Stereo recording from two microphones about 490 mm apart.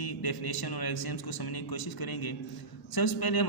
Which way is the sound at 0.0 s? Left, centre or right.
Left.